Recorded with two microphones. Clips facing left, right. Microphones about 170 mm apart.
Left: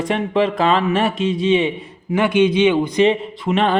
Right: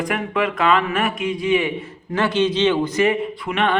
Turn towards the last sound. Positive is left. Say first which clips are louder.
# left 3 dB
turn(degrees=30)  # may be behind; listen again after turning